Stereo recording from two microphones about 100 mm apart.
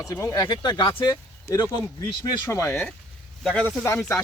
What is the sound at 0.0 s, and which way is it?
Speech, 35° left (ahead or behind).